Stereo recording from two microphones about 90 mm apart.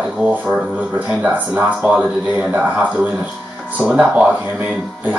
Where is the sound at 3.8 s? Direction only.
10° right (ahead or behind).